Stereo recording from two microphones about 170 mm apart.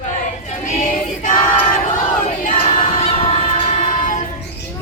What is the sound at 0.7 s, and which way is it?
Choir, 50° left (ahead or behind).